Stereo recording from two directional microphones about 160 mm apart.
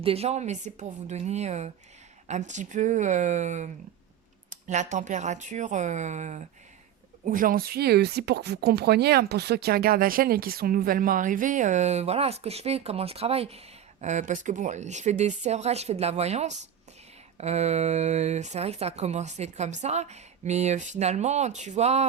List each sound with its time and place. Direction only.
0.0 s speech: 40° right (ahead or behind)
7.3 s speech: 60° right (ahead or behind); by 22.0 s 45° right (ahead or behind)